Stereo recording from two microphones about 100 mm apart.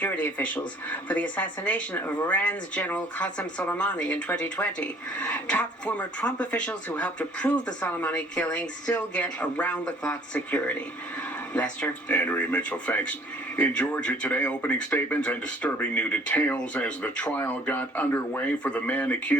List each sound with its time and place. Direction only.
0.0 s speech: 15° left (ahead or behind)